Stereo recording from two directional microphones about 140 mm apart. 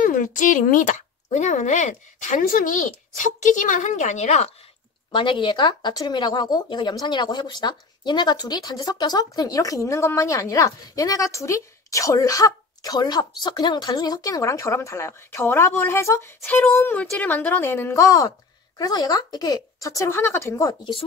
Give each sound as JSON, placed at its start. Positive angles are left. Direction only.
{"t": 0.0, "sound": "speech", "side_deg": 70}
{"t": 5.1, "sound": "speech", "side_deg": 35}
{"t": 20.0, "sound": "speech", "side_deg": 15}